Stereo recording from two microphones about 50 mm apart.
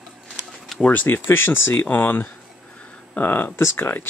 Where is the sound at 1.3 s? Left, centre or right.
Left.